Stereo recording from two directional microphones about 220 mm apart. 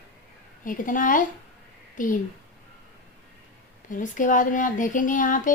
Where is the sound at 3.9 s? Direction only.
35° left (ahead or behind).